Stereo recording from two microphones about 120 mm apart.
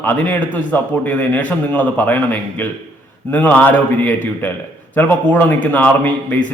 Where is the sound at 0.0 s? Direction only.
15° left (ahead or behind).